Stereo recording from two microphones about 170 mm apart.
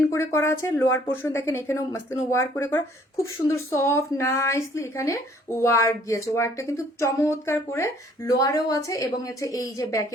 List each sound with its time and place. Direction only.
0.1 s a woman's voice: 15° left (ahead or behind)